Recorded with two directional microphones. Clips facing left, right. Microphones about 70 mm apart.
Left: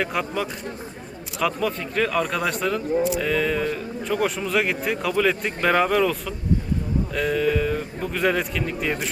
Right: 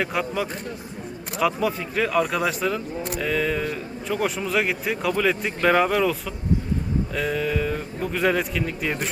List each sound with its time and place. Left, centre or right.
0.0 s speech: centre